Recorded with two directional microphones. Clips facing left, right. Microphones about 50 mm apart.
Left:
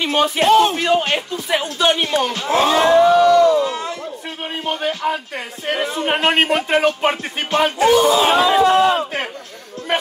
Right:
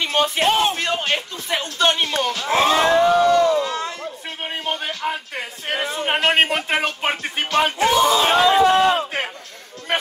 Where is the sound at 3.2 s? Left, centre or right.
Left.